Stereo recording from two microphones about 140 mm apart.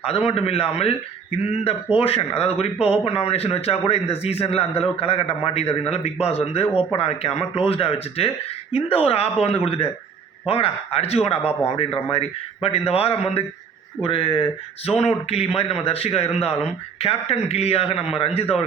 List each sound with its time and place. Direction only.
0.3 s a man's voice: 45° left (ahead or behind)